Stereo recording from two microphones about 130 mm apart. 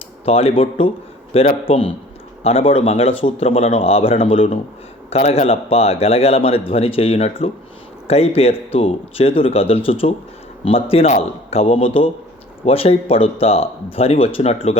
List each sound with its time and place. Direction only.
0.3 s a man's voice: 50° left (ahead or behind)